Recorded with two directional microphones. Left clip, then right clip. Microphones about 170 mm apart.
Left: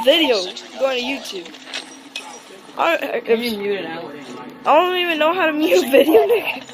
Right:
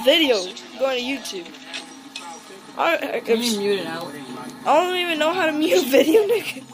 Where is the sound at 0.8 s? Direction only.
5° left (ahead or behind).